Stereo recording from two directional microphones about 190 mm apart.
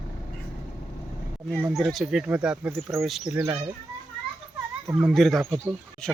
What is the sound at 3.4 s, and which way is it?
Speech, 15° right (ahead or behind).